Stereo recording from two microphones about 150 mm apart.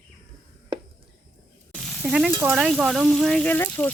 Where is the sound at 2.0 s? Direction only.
10° right (ahead or behind); by 3.9 s 10° left (ahead or behind).